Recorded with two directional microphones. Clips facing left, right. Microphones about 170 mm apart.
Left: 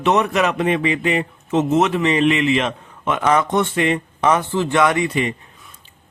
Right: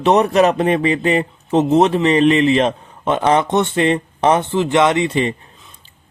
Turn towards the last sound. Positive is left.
turn(degrees=-30)  # may be behind; listen again after turning